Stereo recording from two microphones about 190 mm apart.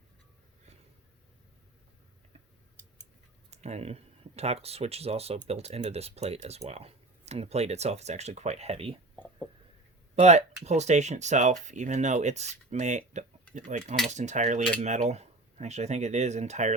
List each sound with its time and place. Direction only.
3.5 s speech: 35° right (ahead or behind)
10.2 s speech: 35° right (ahead or behind)